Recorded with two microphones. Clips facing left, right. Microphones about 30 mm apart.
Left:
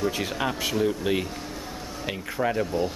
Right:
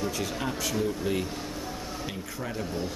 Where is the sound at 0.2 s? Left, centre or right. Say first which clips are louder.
Left 3 dB; left.